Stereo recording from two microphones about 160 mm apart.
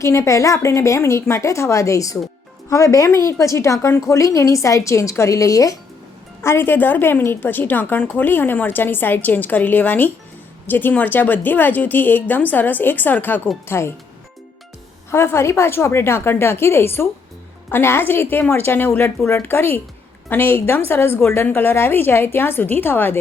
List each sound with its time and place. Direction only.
0.0 s a woman's voice: 20° left (ahead or behind)
15.1 s a woman's voice: 15° left (ahead or behind)